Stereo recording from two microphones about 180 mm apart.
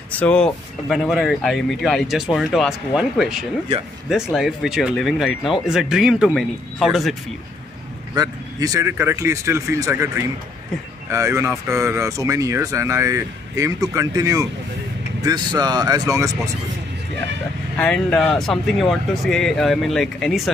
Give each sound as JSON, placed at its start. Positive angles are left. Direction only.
{"t": 0.1, "sound": "speech", "side_deg": 5}
{"t": 3.7, "sound": "speech", "side_deg": -35}
{"t": 4.1, "sound": "speech", "side_deg": 0}
{"t": 8.1, "sound": "speech", "side_deg": -20}
{"t": 17.7, "sound": "speech", "side_deg": 5}